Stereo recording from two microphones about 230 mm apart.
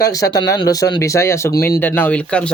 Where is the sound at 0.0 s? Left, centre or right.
Centre.